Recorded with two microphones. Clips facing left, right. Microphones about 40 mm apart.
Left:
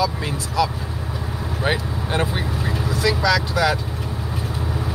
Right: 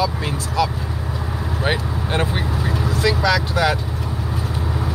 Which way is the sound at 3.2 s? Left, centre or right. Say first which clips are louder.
Left 1 dB; right.